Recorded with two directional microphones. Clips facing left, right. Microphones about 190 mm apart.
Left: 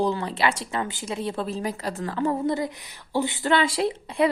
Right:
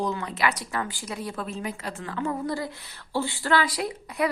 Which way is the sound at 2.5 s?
20° left (ahead or behind).